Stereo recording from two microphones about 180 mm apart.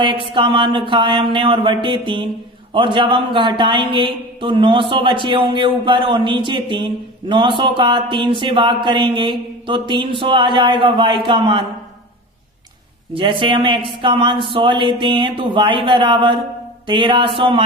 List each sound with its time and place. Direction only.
0.0 s speech: 25° right (ahead or behind)
13.1 s speech: 30° right (ahead or behind)